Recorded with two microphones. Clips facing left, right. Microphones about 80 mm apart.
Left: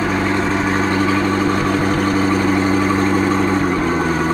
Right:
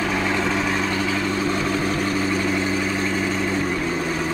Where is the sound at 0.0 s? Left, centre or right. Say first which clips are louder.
Left 4 dB; left.